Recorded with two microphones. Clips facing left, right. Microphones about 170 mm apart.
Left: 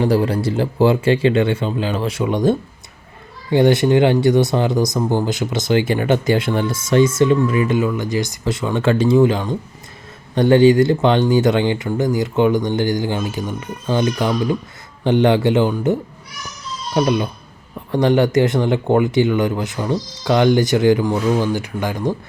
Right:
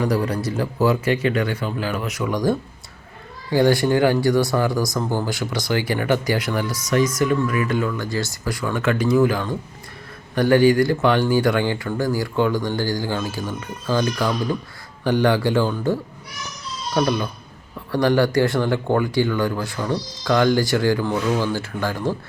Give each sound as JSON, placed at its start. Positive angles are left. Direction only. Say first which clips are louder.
{"t": 0.0, "sound": "speech", "louder": "left 5 dB", "side_deg": 30}